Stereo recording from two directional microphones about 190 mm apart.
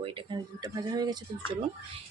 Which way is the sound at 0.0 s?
25° right (ahead or behind).